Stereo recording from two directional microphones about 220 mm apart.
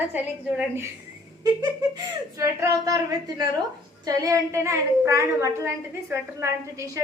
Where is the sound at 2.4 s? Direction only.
15° right (ahead or behind).